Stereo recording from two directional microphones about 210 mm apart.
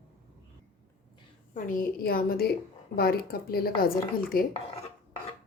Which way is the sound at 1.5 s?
40° left (ahead or behind).